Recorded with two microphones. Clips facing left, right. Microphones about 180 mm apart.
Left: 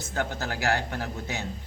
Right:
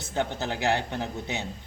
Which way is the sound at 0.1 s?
20° right (ahead or behind).